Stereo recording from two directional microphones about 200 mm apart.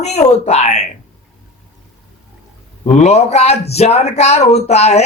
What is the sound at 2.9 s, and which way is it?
Speech, 35° left (ahead or behind).